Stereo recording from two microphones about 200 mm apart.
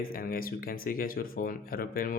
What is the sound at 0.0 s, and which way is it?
Speech, 45° left (ahead or behind).